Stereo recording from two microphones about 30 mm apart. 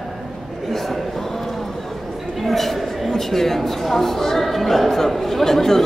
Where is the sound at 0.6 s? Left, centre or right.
Centre.